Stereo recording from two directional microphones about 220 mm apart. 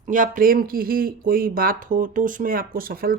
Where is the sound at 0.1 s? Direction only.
40° right (ahead or behind).